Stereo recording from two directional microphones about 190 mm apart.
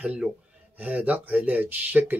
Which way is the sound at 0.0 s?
5° right (ahead or behind).